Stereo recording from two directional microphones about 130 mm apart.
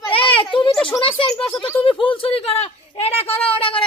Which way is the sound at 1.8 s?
40° left (ahead or behind).